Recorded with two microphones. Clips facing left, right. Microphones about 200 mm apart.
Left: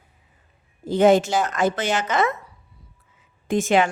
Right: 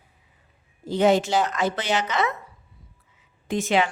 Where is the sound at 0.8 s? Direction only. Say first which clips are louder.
Left 3 dB; 50° left (ahead or behind).